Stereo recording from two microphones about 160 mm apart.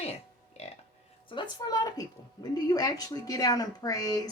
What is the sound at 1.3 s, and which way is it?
A woman's voice, 30° left (ahead or behind).